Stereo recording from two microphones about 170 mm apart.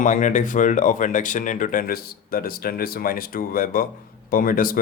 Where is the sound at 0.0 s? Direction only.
50° left (ahead or behind).